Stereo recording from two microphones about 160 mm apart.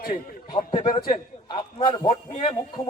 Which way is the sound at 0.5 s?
30° left (ahead or behind).